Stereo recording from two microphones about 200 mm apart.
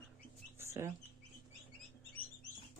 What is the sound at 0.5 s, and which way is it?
Bird, 15° right (ahead or behind).